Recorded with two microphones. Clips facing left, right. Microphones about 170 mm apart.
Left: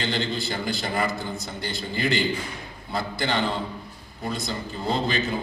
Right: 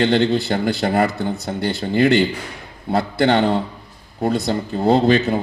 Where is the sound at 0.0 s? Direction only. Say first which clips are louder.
Right 11 dB; 65° right (ahead or behind).